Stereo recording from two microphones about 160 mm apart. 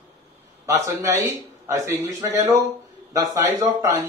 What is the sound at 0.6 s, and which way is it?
A man's voice, 15° right (ahead or behind).